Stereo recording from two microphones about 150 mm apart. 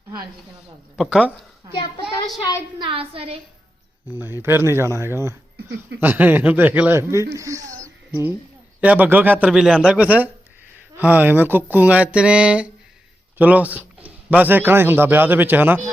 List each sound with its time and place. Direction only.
0.9 s speech: centre (ahead or behind)
1.7 s a child's voice: 30° left (ahead or behind)
2.7 s a woman's voice: 35° right (ahead or behind)
4.1 s speech: 15° right (ahead or behind)